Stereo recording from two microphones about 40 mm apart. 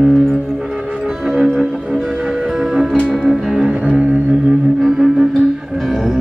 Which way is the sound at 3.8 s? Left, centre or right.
Right.